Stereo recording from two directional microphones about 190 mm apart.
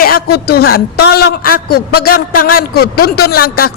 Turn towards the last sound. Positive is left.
turn(degrees=50)  # may be behind; listen again after turning